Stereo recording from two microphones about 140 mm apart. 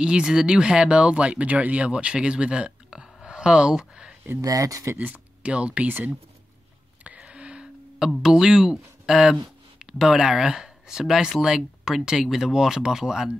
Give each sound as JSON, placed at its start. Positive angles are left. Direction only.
{"t": 0.0, "sound": "speech", "side_deg": -5}
{"t": 4.3, "sound": "speech", "side_deg": -25}
{"t": 7.0, "sound": "a sound", "side_deg": -10}
{"t": 9.9, "sound": "speech", "side_deg": -5}